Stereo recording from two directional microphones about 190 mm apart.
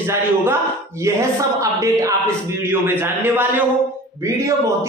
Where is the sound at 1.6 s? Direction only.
15° right (ahead or behind).